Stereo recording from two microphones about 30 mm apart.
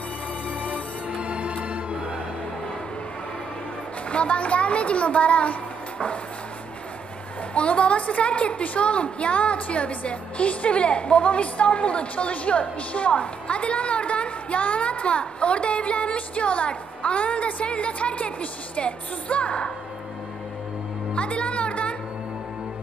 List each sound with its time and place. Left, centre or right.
0.7 s music: right
4.1 s a woman's voice: left
7.5 s a woman's voice: left
21.1 s music: left